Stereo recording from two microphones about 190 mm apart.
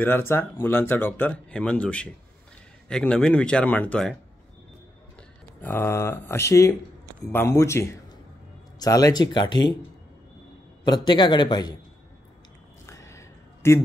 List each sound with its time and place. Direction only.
0.0 s speech: 10° left (ahead or behind)
5.6 s speech: 10° left (ahead or behind)
11.1 s speech: 25° left (ahead or behind)
12.8 s a sound: 15° left (ahead or behind)